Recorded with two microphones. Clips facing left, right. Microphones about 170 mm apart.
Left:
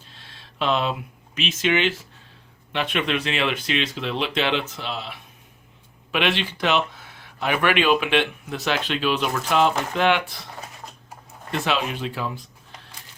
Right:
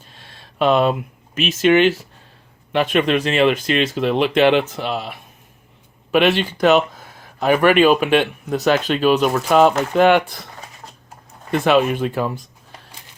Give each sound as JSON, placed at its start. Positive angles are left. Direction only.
{"t": 0.1, "sound": "a sound", "side_deg": -50}
{"t": 1.4, "sound": "speech", "side_deg": -45}
{"t": 11.5, "sound": "speech", "side_deg": -50}